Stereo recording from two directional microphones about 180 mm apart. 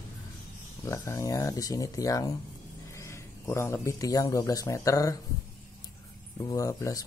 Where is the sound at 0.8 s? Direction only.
15° left (ahead or behind).